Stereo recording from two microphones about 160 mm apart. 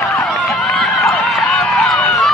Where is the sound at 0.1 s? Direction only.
5° left (ahead or behind).